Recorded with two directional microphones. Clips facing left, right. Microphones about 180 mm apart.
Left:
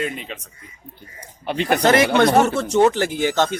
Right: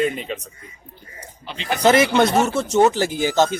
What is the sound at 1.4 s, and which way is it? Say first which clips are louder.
Speech: left 7 dB; 55° left (ahead or behind).